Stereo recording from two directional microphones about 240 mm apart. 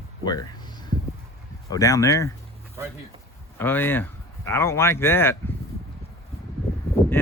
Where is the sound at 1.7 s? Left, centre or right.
Centre.